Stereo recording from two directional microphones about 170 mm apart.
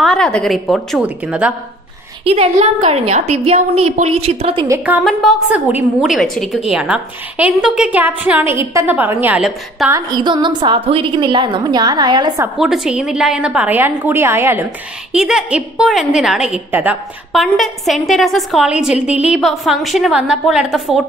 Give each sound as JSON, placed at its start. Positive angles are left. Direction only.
{"t": 0.0, "sound": "a woman's voice", "side_deg": 5}
{"t": 2.2, "sound": "a woman's voice", "side_deg": -35}
{"t": 4.6, "sound": "a woman's voice", "side_deg": -10}
{"t": 5.0, "sound": "a woman's voice", "side_deg": 0}
{"t": 9.8, "sound": "a woman's voice", "side_deg": -25}
{"t": 12.5, "sound": "a woman's voice", "side_deg": -5}